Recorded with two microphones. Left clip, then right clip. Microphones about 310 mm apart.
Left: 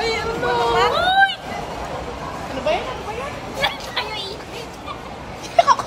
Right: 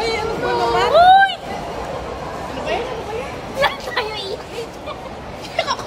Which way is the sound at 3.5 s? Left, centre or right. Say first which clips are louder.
Right 4 dB; centre.